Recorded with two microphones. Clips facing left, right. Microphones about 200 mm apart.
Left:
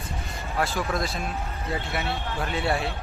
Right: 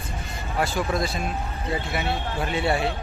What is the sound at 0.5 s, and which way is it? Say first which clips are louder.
Speech: right 2 dB; centre (ahead or behind).